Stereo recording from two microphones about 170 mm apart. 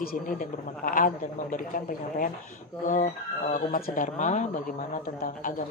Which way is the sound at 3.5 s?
55° left (ahead or behind).